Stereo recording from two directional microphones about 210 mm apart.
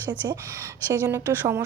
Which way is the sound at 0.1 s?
15° right (ahead or behind).